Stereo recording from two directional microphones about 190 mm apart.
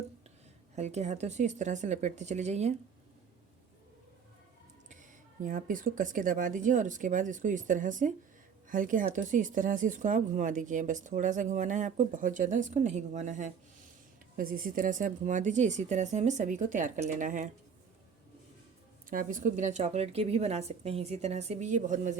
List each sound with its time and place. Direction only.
0.8 s speech: 35° right (ahead or behind)
5.4 s speech: 45° right (ahead or behind)
19.1 s speech: 45° right (ahead or behind)